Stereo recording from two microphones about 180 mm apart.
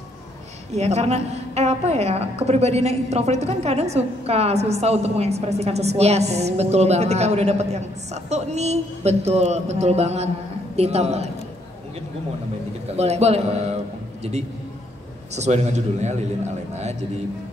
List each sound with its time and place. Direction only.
0.7 s a woman's voice: 40° right (ahead or behind)
12.9 s a woman's voice: 35° right (ahead or behind)
15.3 s a woman's voice: 40° right (ahead or behind)